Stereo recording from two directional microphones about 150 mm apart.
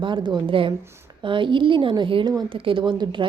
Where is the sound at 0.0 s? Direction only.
30° right (ahead or behind).